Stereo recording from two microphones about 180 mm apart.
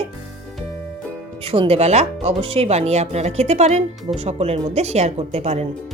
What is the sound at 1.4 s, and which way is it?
Speech, 30° right (ahead or behind).